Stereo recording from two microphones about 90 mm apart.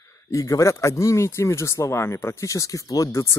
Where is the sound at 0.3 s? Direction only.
40° left (ahead or behind).